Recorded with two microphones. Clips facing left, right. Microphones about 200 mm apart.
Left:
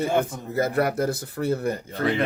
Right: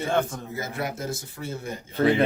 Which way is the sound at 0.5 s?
60° left (ahead or behind).